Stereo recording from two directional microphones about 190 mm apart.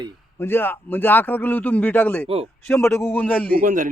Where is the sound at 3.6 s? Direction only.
45° right (ahead or behind).